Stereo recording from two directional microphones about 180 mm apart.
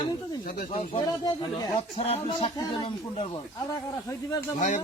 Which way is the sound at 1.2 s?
20° left (ahead or behind).